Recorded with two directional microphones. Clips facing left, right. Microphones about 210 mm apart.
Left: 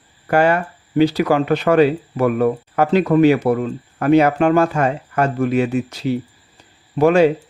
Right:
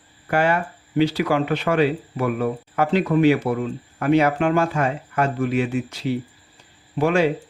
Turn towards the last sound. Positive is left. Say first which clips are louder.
# left 6 dB
turn(degrees=40)  # may be behind; listen again after turning